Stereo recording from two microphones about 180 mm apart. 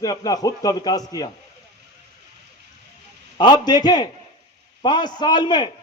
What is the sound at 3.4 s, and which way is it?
A man's voice, 25° left (ahead or behind).